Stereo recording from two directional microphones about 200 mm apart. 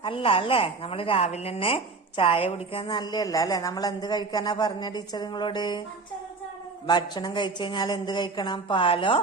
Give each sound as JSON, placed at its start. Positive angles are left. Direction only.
{"t": 0.0, "sound": "a woman's voice", "side_deg": 25}
{"t": 6.8, "sound": "a woman's voice", "side_deg": 20}